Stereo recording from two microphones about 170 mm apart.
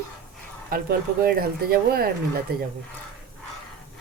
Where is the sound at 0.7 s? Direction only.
60° right (ahead or behind).